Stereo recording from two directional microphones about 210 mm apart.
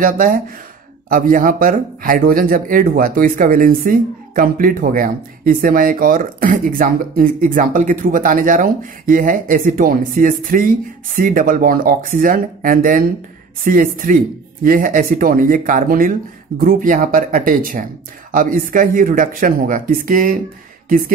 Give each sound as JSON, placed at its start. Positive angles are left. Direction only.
{"t": 0.0, "sound": "speech", "side_deg": -40}